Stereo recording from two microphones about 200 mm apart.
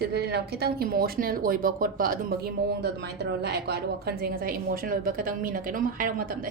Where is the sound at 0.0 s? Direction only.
55° right (ahead or behind).